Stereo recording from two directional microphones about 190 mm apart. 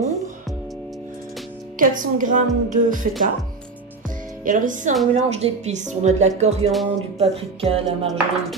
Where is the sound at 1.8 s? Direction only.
45° right (ahead or behind).